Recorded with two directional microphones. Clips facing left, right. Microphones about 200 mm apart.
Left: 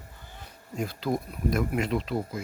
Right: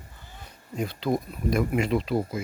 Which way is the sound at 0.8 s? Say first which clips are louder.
Right 2 dB; centre (ahead or behind).